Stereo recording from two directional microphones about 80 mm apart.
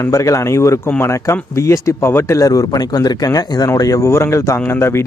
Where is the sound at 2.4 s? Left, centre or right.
Left.